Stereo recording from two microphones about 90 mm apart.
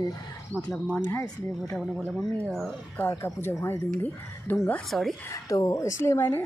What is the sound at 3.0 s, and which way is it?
A woman's voice, 30° left (ahead or behind).